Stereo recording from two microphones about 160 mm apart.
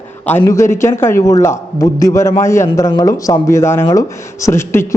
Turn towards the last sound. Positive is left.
turn(degrees=15)  # may be behind; listen again after turning